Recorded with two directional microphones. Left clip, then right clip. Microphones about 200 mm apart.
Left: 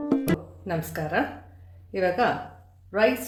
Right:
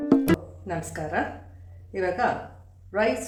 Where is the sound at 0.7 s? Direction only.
45° left (ahead or behind).